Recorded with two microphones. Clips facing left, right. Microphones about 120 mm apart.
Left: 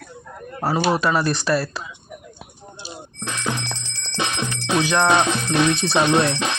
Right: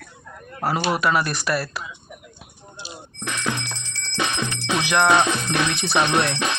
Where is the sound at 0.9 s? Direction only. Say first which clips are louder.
Left 2 dB; 25° left (ahead or behind).